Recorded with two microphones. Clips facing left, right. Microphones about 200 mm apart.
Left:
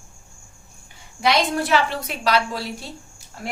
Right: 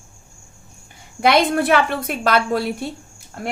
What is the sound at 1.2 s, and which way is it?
A woman's voice, 55° right (ahead or behind).